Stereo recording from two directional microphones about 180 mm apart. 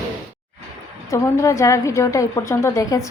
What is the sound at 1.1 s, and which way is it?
A woman's voice, 15° left (ahead or behind).